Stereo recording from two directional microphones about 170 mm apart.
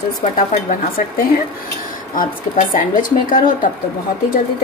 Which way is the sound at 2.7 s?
55° left (ahead or behind).